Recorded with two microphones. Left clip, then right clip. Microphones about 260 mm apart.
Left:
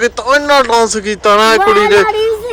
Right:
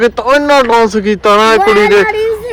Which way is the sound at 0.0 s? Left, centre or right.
Centre.